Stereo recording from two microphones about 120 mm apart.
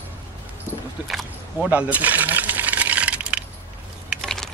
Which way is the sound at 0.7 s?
20° left (ahead or behind).